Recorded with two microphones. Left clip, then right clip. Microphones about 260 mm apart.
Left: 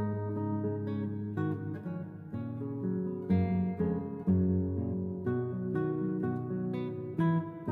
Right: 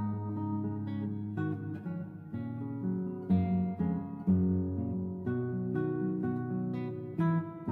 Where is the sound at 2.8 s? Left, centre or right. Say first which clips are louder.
Left 2 dB; left.